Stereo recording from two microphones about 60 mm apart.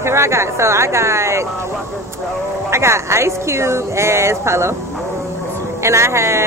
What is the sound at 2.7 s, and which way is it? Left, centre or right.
Speech, right.